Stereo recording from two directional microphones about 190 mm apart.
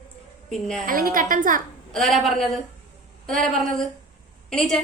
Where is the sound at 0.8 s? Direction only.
50° right (ahead or behind).